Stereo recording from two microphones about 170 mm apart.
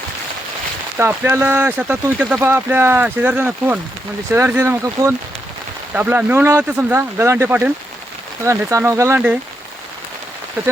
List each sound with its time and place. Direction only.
0.9 s speech: 15° right (ahead or behind)